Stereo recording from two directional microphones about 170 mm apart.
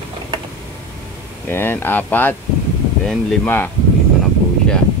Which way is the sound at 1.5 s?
10° left (ahead or behind).